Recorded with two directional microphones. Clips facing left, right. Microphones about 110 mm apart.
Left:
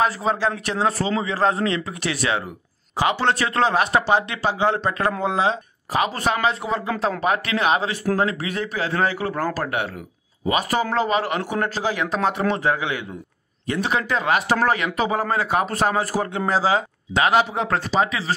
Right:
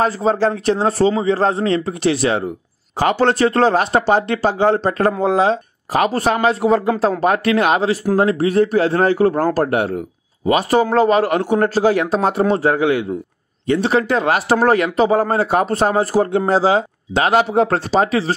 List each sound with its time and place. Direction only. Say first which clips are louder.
0.0 s speech: right 5 dB; 35° right (ahead or behind)